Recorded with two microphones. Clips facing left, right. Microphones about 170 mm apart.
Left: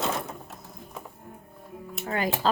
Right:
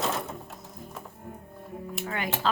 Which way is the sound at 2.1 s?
35° left (ahead or behind).